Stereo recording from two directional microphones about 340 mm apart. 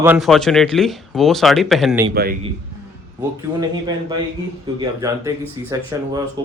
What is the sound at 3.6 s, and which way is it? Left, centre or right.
Speech, centre.